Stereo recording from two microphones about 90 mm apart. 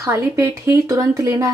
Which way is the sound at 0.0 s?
35° right (ahead or behind).